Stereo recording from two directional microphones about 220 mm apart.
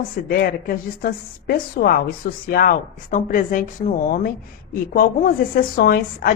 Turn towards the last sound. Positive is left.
turn(degrees=40)  # may be behind; listen again after turning